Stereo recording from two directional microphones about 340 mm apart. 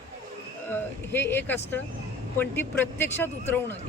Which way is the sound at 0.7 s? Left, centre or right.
Centre.